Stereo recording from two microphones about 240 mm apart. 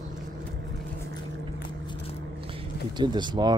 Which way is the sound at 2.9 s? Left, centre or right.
Centre.